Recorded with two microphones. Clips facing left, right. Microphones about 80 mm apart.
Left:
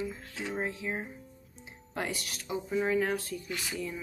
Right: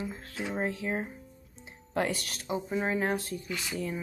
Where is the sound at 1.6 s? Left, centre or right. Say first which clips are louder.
Right 6 dB; right.